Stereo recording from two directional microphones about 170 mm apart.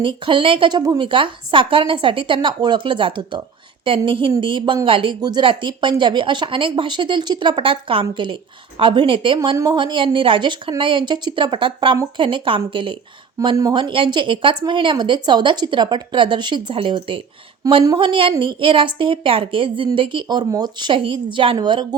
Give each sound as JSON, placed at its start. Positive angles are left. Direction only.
{"t": 0.0, "sound": "a woman's voice", "side_deg": -30}